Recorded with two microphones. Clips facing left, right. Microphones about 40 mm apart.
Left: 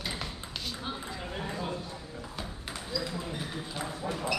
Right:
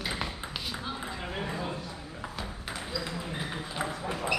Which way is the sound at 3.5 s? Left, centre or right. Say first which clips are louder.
Right 3 dB; right.